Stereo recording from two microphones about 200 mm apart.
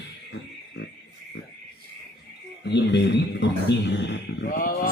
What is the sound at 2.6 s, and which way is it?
A man's voice, 60° left (ahead or behind).